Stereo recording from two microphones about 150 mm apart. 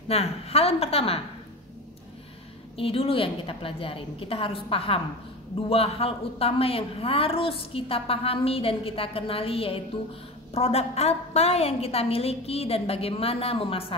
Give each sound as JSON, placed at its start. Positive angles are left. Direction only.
{"t": 0.1, "sound": "a woman's voice", "side_deg": 40}
{"t": 2.8, "sound": "a woman's voice", "side_deg": 40}